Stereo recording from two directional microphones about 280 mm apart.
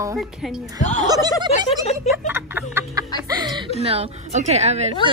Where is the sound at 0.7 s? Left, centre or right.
Left.